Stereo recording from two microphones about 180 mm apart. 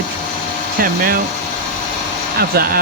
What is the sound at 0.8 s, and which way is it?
Speech, 55° right (ahead or behind).